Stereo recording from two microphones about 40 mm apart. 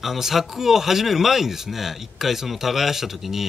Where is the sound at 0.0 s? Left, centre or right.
Centre.